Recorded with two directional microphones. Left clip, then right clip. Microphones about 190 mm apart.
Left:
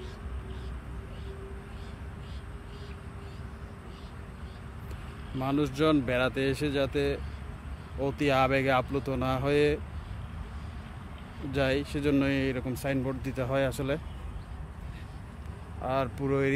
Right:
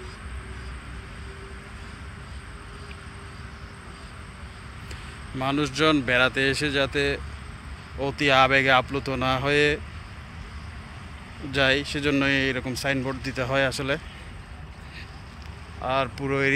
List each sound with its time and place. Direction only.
5.4 s speech: 10° left (ahead or behind)
11.5 s speech: 10° left (ahead or behind)
15.8 s speech: 20° left (ahead or behind)